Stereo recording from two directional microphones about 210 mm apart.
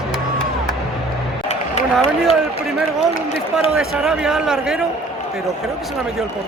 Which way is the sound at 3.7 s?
Centre (ahead or behind).